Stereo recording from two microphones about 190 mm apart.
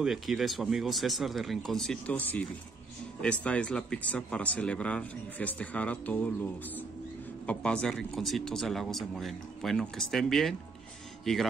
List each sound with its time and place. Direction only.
0.0 s speech: centre (ahead or behind)
7.4 s speech: 5° left (ahead or behind)